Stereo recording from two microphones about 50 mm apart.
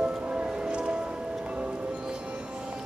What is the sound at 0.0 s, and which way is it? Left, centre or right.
Music, right.